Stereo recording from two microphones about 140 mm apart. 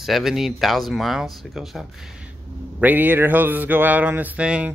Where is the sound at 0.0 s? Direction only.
Centre (ahead or behind).